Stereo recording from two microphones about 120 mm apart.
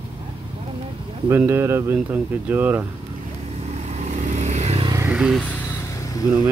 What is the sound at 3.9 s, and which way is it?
Vehicle, 85° right.